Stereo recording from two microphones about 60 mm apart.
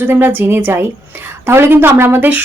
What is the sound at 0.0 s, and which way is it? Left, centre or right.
Speech, right.